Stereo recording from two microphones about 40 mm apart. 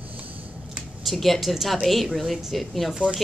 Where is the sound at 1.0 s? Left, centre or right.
Centre.